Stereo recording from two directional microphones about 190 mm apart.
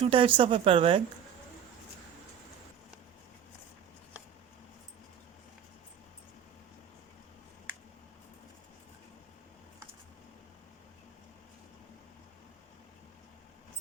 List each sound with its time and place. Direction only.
0.0 s speech: 30° right (ahead or behind)